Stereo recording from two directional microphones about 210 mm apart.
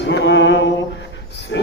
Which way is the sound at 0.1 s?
55° left (ahead or behind).